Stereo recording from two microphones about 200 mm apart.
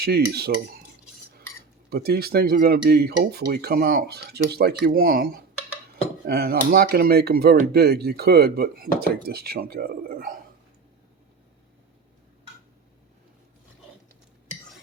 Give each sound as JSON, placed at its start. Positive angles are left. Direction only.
{"t": 0.0, "sound": "speech", "side_deg": -50}
{"t": 1.9, "sound": "speech", "side_deg": -50}